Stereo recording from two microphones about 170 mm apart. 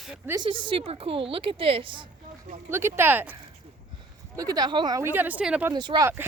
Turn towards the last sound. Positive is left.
turn(degrees=-25)  # may be behind; listen again after turning